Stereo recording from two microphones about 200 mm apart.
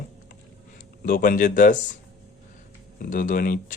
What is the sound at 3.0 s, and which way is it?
Speech, 40° left (ahead or behind).